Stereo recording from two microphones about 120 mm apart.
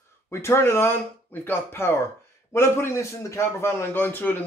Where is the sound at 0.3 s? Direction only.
20° left (ahead or behind).